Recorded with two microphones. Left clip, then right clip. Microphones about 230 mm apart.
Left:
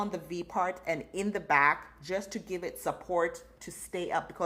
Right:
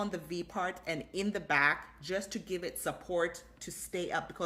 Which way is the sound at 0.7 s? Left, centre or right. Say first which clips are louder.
Left 4 dB; centre.